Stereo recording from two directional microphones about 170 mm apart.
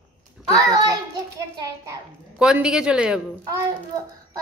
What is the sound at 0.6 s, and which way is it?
Speech, 20° right (ahead or behind).